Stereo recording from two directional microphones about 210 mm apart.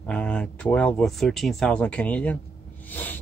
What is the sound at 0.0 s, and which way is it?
Speech, 5° left (ahead or behind).